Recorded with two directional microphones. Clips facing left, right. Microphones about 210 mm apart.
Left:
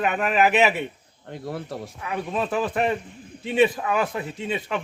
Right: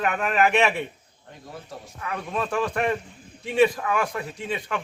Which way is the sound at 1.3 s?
70° left (ahead or behind).